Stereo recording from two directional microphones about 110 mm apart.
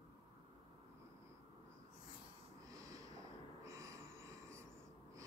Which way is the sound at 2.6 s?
30° right (ahead or behind).